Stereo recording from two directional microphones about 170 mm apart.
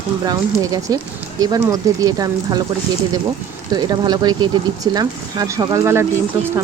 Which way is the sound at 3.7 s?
25° right (ahead or behind).